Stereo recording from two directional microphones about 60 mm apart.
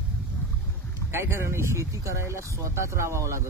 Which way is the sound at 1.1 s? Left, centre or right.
Right.